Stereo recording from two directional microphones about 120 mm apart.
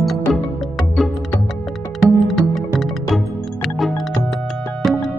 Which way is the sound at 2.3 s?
Centre (ahead or behind).